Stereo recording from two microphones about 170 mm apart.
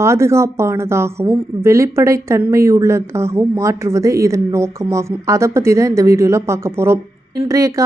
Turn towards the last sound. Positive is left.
turn(degrees=-20)  # may be behind; listen again after turning